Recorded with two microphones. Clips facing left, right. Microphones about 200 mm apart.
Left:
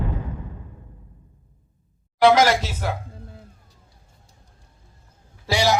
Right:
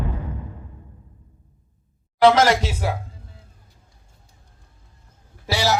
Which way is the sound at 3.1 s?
55° left (ahead or behind).